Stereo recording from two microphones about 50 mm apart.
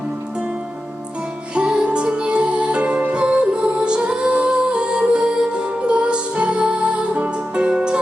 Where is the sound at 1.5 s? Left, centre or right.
Centre.